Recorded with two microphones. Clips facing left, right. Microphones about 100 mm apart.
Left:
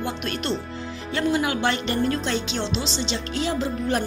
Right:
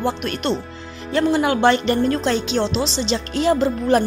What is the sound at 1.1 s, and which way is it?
Speech, 40° right (ahead or behind).